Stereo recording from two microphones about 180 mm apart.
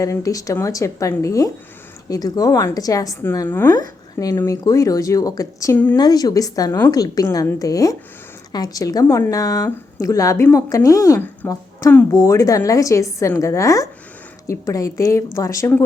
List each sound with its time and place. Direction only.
0.0 s a woman's voice: 20° left (ahead or behind)
6.0 s a woman's voice: 20° left (ahead or behind)